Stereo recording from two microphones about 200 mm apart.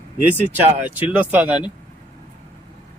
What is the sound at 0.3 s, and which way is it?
Speech, 10° right (ahead or behind).